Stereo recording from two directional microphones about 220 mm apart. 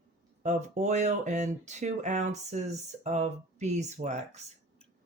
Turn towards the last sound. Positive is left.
turn(degrees=-30)  # may be behind; listen again after turning